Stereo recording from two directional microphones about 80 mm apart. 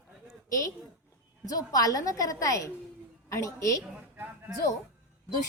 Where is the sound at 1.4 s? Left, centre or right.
Left.